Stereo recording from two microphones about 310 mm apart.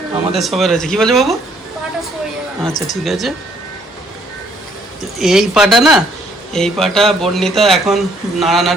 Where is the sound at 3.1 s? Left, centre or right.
Centre.